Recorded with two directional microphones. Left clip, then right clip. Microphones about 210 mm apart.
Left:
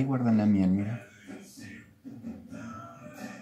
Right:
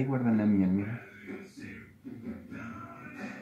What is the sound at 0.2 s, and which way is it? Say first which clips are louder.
Speech: left 1 dB; 50° left (ahead or behind).